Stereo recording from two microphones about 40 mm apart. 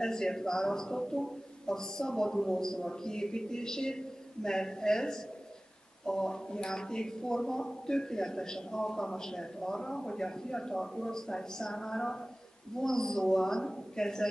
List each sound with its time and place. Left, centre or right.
0.0 s speech: centre